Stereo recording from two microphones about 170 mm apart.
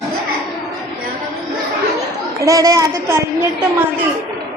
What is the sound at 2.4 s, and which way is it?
Speech, 20° right (ahead or behind).